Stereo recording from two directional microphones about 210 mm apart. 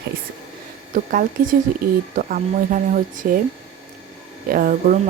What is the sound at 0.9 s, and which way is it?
Speech, 40° right (ahead or behind).